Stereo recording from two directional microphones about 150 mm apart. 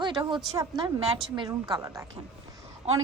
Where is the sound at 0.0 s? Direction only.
30° right (ahead or behind).